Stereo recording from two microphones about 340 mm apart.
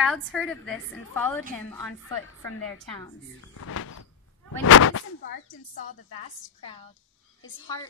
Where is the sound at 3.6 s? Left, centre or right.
Left.